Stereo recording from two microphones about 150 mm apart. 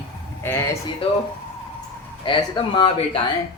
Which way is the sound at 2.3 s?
35° left (ahead or behind).